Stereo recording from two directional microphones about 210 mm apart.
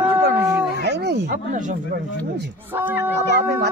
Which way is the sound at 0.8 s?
50° right (ahead or behind).